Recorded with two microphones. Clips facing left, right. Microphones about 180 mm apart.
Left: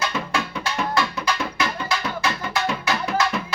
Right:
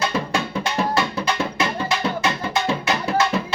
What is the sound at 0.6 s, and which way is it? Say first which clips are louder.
Music: right 2 dB; 25° right (ahead or behind).